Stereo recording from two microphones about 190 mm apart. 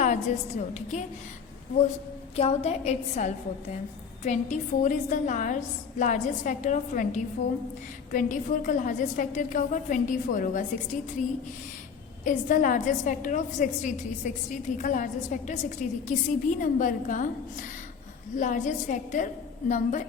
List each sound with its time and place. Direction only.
0.0 s a woman's voice: 40° left (ahead or behind)
2.3 s a woman's voice: 35° left (ahead or behind)
12.2 s a woman's voice: 45° left (ahead or behind)